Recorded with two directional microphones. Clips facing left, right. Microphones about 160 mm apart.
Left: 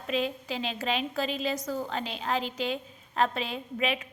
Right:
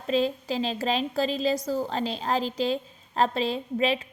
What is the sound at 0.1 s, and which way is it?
A woman's voice, 35° right (ahead or behind).